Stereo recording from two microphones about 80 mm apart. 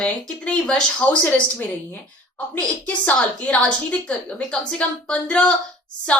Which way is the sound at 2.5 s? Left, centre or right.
Centre.